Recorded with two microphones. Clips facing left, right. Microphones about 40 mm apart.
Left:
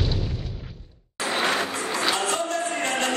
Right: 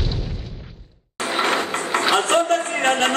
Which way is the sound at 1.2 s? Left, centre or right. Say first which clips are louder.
Right 3 dB; right.